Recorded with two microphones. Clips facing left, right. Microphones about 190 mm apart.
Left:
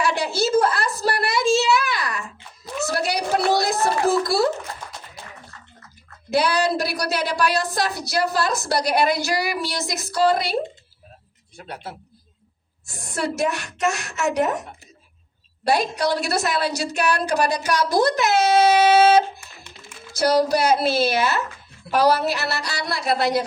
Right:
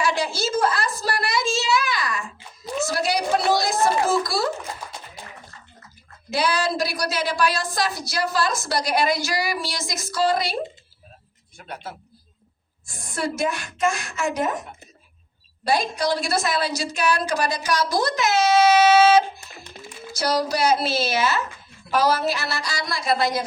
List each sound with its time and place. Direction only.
0.0 s a sound: 60° left (ahead or behind)
6.3 s a woman's voice: 60° left (ahead or behind)
11.5 s speech: 30° left (ahead or behind)
12.8 s a woman's voice: 70° left (ahead or behind)
15.6 s a woman's voice: 65° left (ahead or behind)
20.1 s a woman's voice: 55° left (ahead or behind)